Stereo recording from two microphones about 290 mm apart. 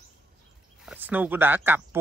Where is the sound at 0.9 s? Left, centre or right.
Centre.